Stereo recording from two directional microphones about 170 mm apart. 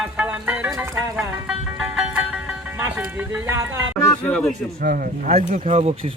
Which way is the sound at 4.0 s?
20° left (ahead or behind).